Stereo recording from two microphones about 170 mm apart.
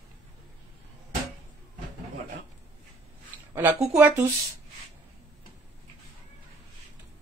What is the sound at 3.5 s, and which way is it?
Speech, 10° right (ahead or behind).